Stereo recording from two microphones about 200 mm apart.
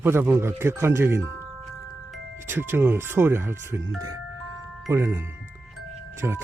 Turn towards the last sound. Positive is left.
turn(degrees=-10)  # may be behind; listen again after turning